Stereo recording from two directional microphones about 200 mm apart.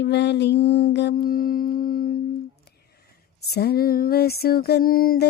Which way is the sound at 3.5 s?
55° left (ahead or behind).